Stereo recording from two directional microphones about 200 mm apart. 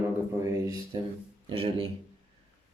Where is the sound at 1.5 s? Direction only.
30° right (ahead or behind).